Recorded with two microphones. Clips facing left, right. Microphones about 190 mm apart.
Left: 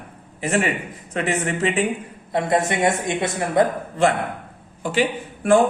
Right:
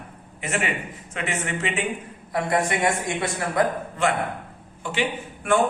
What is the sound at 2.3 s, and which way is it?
A man's voice, 25° left (ahead or behind).